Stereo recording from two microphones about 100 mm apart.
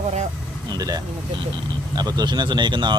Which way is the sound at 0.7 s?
40° right (ahead or behind).